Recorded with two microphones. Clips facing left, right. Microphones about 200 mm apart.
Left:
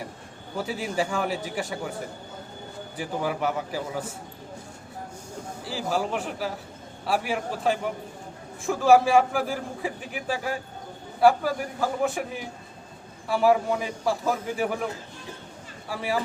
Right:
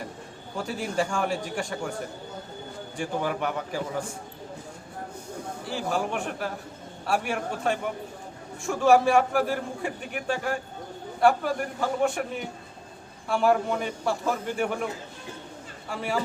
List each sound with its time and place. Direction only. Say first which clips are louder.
0.5 s a man's voice: even; 5° left (ahead or behind)
3.0 s a man's voice: left 1 dB; 5° left (ahead or behind)
5.6 s a man's voice: left 1 dB; centre (ahead or behind)
15.9 s a man's voice: left 1 dB; 5° left (ahead or behind)